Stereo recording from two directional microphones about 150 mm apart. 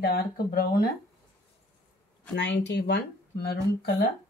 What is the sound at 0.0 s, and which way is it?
Speech, 90° left.